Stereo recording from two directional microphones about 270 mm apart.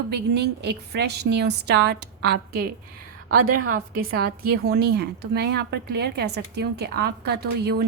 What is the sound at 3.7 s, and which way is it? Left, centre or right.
A woman's voice, right.